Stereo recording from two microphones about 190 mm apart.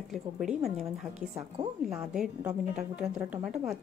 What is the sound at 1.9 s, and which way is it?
A woman's voice, 5° right (ahead or behind).